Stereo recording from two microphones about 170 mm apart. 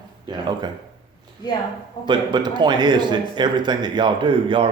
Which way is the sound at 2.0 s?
25° right (ahead or behind).